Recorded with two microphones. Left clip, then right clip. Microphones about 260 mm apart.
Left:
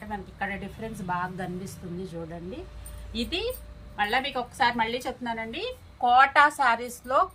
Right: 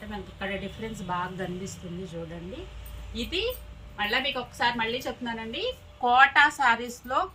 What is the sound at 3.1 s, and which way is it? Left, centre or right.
A woman's voice, centre.